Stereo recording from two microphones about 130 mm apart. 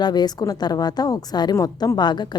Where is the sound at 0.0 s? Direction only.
30° left (ahead or behind).